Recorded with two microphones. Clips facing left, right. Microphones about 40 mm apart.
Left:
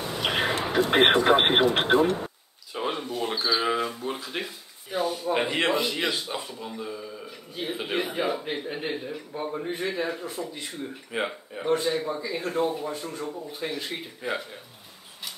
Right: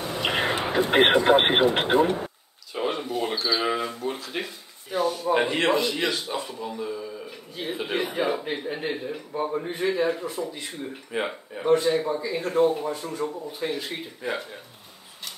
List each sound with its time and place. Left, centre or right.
0.0 s a sound: centre
0.9 s speech: centre
1.2 s speech: centre
2.2 s a sound: centre
5.3 s speech: centre
9.1 s speech: centre
9.5 s speech: centre